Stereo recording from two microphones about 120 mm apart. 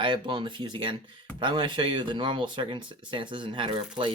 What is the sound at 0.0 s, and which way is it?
Speech, 45° right (ahead or behind).